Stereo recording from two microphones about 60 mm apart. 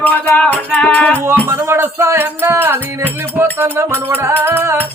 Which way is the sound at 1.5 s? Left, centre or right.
Right.